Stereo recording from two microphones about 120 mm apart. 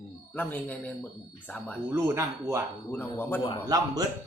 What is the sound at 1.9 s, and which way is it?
Speech, 25° right (ahead or behind).